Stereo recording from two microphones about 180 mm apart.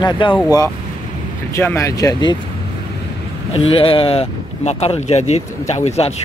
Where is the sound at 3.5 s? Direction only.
35° left (ahead or behind).